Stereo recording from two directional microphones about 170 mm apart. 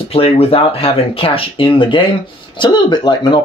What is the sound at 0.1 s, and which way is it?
Speech, 35° left (ahead or behind).